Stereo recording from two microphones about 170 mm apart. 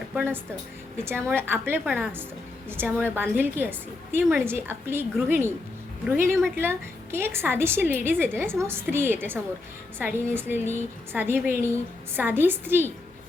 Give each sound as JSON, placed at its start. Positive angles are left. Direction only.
{"t": 1.0, "sound": "a woman's voice", "side_deg": -15}